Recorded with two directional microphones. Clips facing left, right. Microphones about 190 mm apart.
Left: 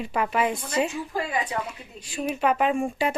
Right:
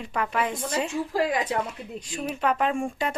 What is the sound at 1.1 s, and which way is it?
Speech, 90° right.